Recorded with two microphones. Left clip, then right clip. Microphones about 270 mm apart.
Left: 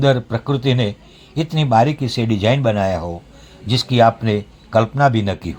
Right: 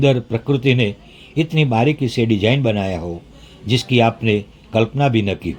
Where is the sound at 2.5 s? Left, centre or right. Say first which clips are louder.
Left 2 dB; left.